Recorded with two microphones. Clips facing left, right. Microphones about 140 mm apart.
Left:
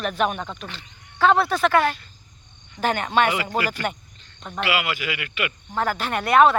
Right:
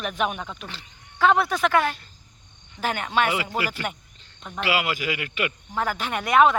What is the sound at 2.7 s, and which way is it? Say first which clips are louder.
Cricket: left 3 dB; 5° right (ahead or behind).